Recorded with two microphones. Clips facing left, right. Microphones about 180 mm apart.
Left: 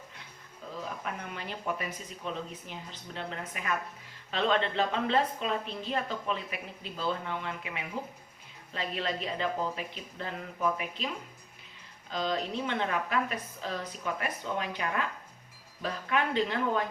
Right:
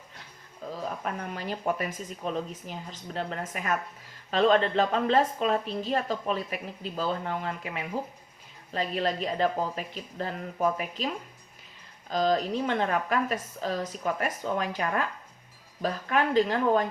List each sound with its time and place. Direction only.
0.6 s a sound: 40° right (ahead or behind)
1.0 s a woman's voice: 40° right (ahead or behind)
8.7 s a woman's voice: 40° right (ahead or behind)